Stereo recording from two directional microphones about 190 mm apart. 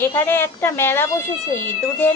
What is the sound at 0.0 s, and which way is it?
A woman's voice, 10° left (ahead or behind).